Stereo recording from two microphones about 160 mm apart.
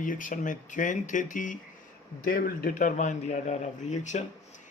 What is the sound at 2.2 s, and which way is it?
Speech, 65° left (ahead or behind).